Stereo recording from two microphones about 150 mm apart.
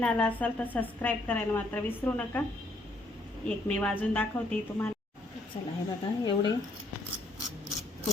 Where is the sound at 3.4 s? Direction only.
10° left (ahead or behind).